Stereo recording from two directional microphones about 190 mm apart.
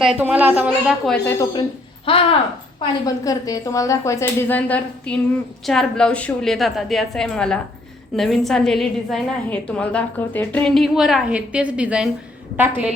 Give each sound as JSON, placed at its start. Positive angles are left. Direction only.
{"t": 0.0, "sound": "a woman's voice", "side_deg": -5}
{"t": 2.1, "sound": "speech", "side_deg": 25}
{"t": 3.2, "sound": "a woman's voice", "side_deg": 20}